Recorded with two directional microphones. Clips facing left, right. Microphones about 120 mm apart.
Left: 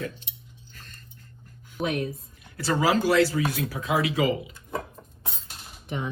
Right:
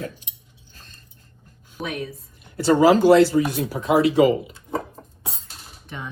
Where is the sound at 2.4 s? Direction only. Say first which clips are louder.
Right 9 dB; 20° right (ahead or behind).